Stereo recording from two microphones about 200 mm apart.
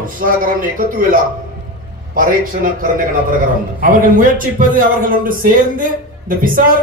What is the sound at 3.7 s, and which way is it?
A man's voice, 45° right (ahead or behind).